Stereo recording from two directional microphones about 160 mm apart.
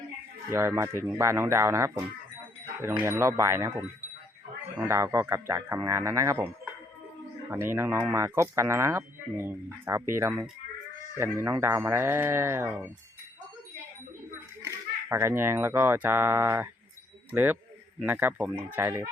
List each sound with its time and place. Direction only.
0.5 s speech: 15° right (ahead or behind)
3.0 s speech: 15° right (ahead or behind)
7.5 s speech: 15° right (ahead or behind)
14.6 s speech: 15° right (ahead or behind)